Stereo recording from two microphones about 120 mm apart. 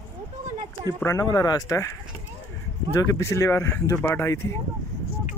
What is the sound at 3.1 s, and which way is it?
Speech, 25° left (ahead or behind).